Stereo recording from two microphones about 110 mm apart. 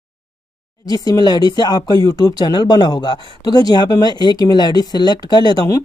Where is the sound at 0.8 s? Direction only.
35° left (ahead or behind).